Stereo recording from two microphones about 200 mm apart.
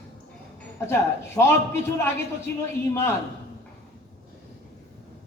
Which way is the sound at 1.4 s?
10° left (ahead or behind).